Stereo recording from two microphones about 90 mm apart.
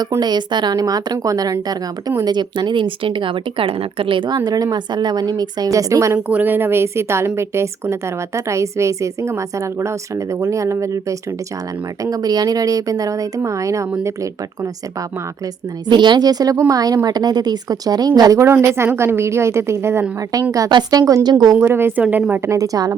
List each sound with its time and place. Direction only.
0.2 s speech: 55° right (ahead or behind)
2.2 s speech: 55° right (ahead or behind); by 6.1 s 35° right (ahead or behind)
6.1 s a woman's voice: 15° right (ahead or behind); by 13.8 s 35° right (ahead or behind)
15.9 s a woman's voice: 55° right (ahead or behind)
18.4 s a woman's voice: 25° right (ahead or behind)
20.7 s a woman's voice: 55° right (ahead or behind)
21.0 s a woman's voice: 30° right (ahead or behind)
21.2 s speech: 50° right (ahead or behind)
21.5 s a woman's voice: 25° right (ahead or behind)
22.4 s a woman's voice: 40° right (ahead or behind)